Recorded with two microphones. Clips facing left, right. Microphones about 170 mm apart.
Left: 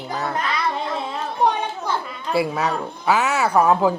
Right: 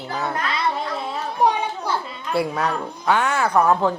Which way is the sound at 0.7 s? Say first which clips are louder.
Left 1 dB; 5° right (ahead or behind).